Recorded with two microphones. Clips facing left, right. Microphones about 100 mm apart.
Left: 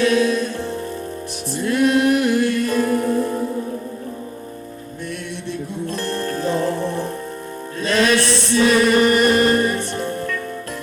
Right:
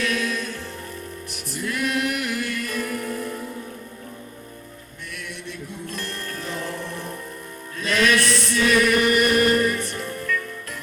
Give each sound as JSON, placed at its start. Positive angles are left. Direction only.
{"t": 0.0, "sound": "music", "side_deg": 30}
{"t": 5.5, "sound": "music", "side_deg": 30}